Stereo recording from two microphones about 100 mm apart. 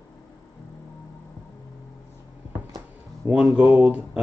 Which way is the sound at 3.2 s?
20° right (ahead or behind).